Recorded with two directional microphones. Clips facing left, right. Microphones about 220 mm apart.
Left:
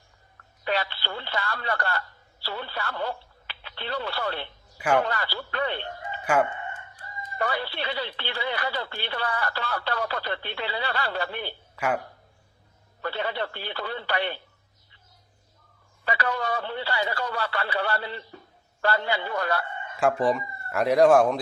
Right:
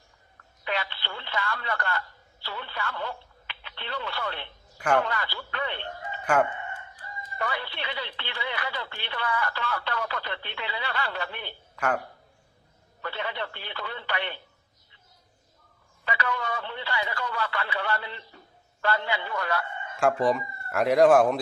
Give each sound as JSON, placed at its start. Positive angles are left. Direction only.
{"t": 0.6, "sound": "speech", "side_deg": 35}
{"t": 4.8, "sound": "speech", "side_deg": 5}
{"t": 5.0, "sound": "speech", "side_deg": 35}
{"t": 6.2, "sound": "speech", "side_deg": 10}
{"t": 7.3, "sound": "speech", "side_deg": 35}
{"t": 13.0, "sound": "speech", "side_deg": 35}
{"t": 16.0, "sound": "speech", "side_deg": 35}
{"t": 20.0, "sound": "speech", "side_deg": 0}